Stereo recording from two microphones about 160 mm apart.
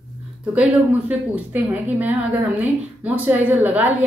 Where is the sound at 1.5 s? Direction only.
10° right (ahead or behind).